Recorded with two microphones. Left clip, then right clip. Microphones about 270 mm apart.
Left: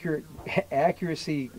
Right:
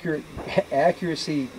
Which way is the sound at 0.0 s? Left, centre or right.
Left.